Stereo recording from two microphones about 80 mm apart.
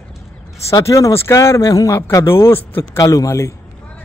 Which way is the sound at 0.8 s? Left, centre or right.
Left.